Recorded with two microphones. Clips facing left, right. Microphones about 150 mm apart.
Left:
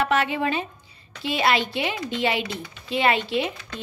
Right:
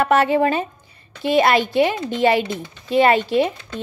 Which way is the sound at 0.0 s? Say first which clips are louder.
Right 7 dB; 45° right (ahead or behind).